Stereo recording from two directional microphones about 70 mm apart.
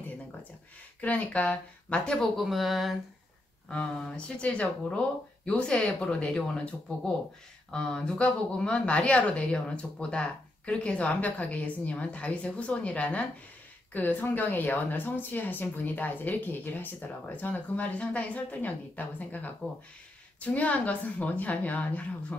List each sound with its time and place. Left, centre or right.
1.0 s speech: left
2.1 s speech: centre
3.6 s speech: centre
7.7 s speech: centre